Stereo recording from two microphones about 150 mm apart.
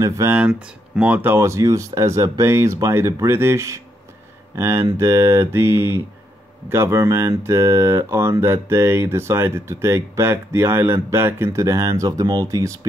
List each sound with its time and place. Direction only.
0.0 s speech: 20° right (ahead or behind)
0.4 s speech: 5° right (ahead or behind); by 12.7 s 20° right (ahead or behind)